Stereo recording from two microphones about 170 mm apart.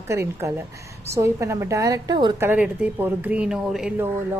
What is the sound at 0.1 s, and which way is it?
A woman's voice, 15° right (ahead or behind).